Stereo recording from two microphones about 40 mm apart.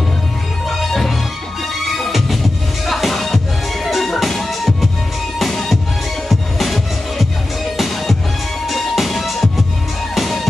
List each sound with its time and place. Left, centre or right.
0.7 s music: centre